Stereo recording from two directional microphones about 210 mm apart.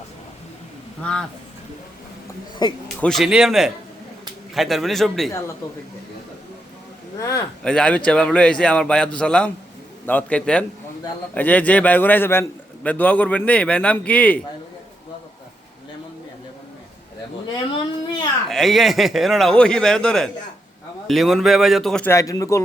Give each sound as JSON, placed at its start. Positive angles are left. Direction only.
{"t": 1.0, "sound": "a man's voice", "side_deg": 5}
{"t": 2.6, "sound": "a man's voice", "side_deg": 20}
{"t": 3.0, "sound": "a man's voice", "side_deg": 0}
{"t": 7.2, "sound": "a man's voice", "side_deg": 15}
{"t": 18.4, "sound": "a man's voice", "side_deg": 0}